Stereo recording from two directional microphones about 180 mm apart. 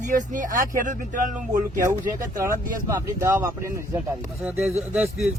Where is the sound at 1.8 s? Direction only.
15° right (ahead or behind).